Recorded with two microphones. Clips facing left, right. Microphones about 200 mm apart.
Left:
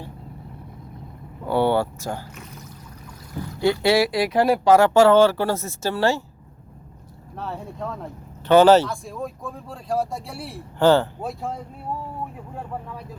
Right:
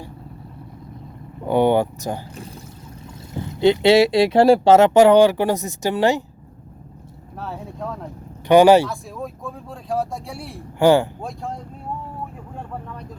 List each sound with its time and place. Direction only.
1.5 s a sound: 15° right (ahead or behind)
3.3 s speech: 20° right (ahead or behind)
7.3 s speech: centre (ahead or behind)
8.4 s speech: 15° right (ahead or behind)
8.9 s speech: centre (ahead or behind)
10.8 s speech: 10° right (ahead or behind)
11.2 s speech: 5° left (ahead or behind)